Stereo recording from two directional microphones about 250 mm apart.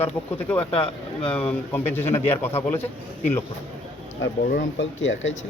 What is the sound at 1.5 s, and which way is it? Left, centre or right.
Speech, centre.